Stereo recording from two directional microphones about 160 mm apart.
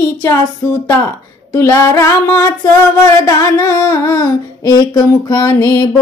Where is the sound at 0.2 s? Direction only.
15° left (ahead or behind).